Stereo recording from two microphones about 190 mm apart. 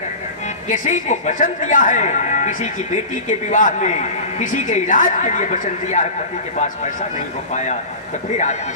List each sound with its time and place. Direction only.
0.7 s speech: 40° left (ahead or behind)
7.5 s speech: 40° left (ahead or behind)